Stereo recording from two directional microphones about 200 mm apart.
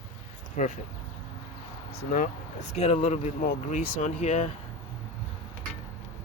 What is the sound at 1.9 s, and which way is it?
Speech, 40° left (ahead or behind).